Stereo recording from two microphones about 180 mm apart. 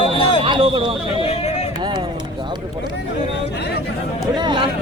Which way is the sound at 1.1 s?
35° left (ahead or behind).